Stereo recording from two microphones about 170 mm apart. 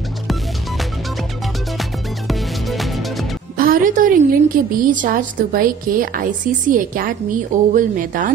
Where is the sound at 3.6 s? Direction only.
55° right (ahead or behind).